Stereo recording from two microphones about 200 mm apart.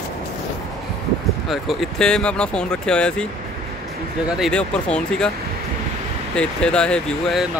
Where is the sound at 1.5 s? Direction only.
Centre (ahead or behind).